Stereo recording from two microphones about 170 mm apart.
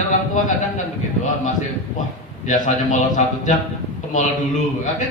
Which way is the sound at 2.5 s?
45° left (ahead or behind).